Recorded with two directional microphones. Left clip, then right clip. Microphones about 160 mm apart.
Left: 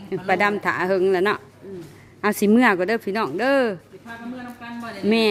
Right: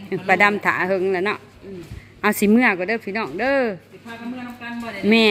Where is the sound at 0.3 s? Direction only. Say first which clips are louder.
Right 4 dB; 10° left (ahead or behind).